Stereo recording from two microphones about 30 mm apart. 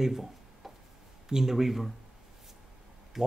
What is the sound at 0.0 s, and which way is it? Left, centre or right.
Speech, centre.